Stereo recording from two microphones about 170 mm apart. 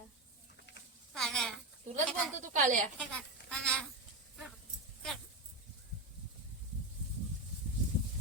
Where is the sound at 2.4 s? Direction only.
50° right (ahead or behind).